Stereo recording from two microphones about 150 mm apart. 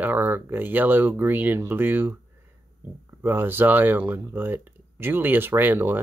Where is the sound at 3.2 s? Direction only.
15° right (ahead or behind).